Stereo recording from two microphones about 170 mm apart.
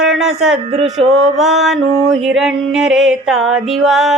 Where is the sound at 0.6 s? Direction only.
35° right (ahead or behind).